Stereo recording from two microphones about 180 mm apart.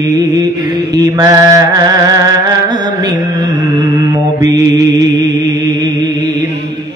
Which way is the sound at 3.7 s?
25° right (ahead or behind).